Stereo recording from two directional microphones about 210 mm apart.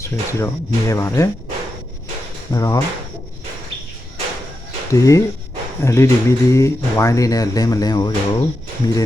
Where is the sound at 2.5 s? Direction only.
15° left (ahead or behind).